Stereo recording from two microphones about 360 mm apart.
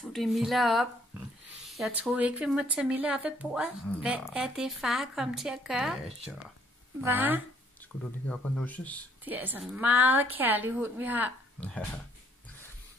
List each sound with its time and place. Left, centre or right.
0.1 s speech: centre